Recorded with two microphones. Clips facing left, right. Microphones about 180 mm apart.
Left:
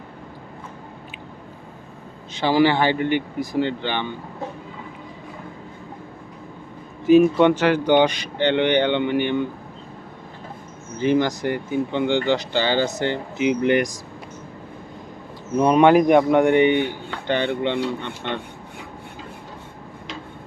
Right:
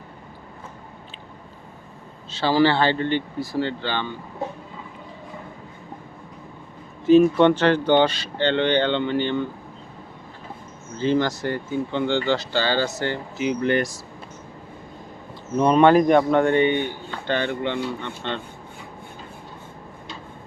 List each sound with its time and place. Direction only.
2.3 s speech: 15° left (ahead or behind)
7.1 s speech: 10° left (ahead or behind)
10.9 s speech: 15° left (ahead or behind)
15.5 s speech: 10° left (ahead or behind)